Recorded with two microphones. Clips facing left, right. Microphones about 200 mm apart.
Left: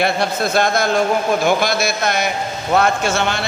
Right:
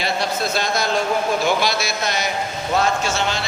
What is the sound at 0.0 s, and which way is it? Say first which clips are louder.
A man's voice: left 4 dB; 55° left (ahead or behind).